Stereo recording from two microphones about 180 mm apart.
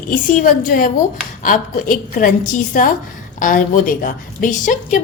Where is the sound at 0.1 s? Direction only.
50° left (ahead or behind).